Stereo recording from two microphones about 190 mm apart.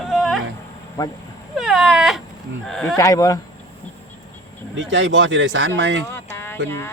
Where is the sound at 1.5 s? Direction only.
Centre (ahead or behind).